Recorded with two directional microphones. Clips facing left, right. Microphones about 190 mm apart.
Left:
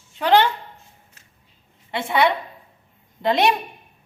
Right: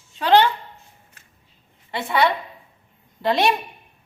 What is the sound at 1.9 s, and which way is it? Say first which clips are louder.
A woman's voice: left 1 dB; 20° left (ahead or behind).